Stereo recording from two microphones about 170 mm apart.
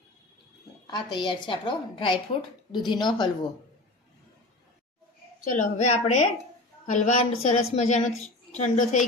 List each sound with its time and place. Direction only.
0.9 s a woman's voice: 25° left (ahead or behind)
5.5 s a woman's voice: 45° left (ahead or behind)